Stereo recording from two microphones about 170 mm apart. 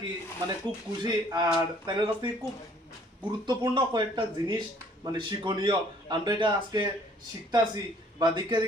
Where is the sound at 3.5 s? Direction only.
25° right (ahead or behind).